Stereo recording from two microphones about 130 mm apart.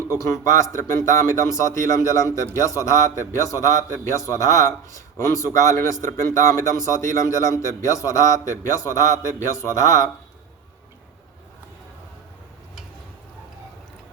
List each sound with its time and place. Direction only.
0.1 s a man's voice: 25° left (ahead or behind)